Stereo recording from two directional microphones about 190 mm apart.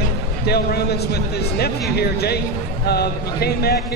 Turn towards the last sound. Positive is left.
turn(degrees=55)  # may be behind; listen again after turning